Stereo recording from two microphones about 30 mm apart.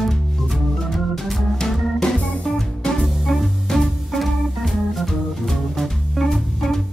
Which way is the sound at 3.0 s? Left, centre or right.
Centre.